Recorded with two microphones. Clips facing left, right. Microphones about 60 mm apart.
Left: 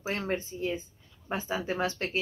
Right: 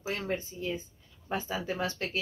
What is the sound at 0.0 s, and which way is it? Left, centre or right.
A woman's voice, left.